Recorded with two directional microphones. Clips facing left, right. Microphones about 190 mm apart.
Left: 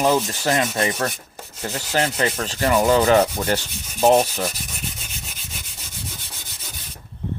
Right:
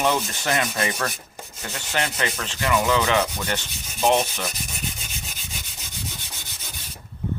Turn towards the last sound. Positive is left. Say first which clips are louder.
# even
turn(degrees=0)  # may be behind; listen again after turning